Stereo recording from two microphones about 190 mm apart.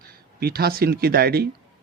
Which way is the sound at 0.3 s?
55° right (ahead or behind).